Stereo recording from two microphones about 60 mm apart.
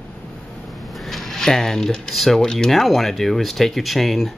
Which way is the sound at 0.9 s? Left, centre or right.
Centre.